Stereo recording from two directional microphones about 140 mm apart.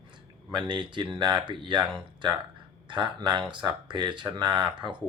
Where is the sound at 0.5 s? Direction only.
35° right (ahead or behind).